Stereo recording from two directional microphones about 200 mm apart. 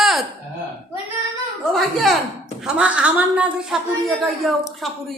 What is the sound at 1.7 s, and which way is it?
A woman's voice, centre (ahead or behind).